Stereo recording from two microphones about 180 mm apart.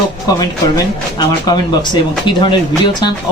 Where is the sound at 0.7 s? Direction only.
20° left (ahead or behind).